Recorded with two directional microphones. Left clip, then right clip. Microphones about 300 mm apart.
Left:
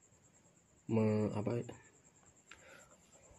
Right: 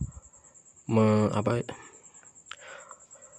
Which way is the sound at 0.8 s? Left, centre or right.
Right.